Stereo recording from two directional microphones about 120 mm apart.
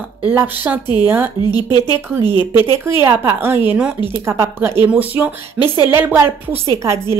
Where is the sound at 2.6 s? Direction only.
20° right (ahead or behind).